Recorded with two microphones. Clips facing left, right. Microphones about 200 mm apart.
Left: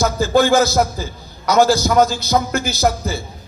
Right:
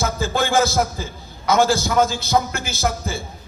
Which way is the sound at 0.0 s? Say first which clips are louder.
Left 7 dB; 40° left (ahead or behind).